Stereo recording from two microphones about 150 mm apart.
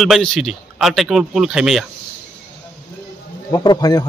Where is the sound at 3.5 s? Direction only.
25° left (ahead or behind).